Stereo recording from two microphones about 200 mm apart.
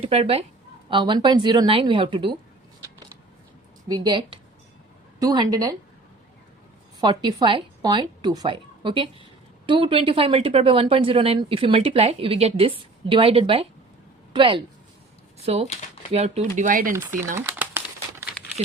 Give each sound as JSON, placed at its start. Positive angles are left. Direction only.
{"t": 0.0, "sound": "speech", "side_deg": -30}
{"t": 3.8, "sound": "speech", "side_deg": -20}
{"t": 7.0, "sound": "speech", "side_deg": -20}
{"t": 16.1, "sound": "speech", "side_deg": -30}
{"t": 16.9, "sound": "speech", "side_deg": -15}
{"t": 17.3, "sound": "crumpling", "side_deg": -10}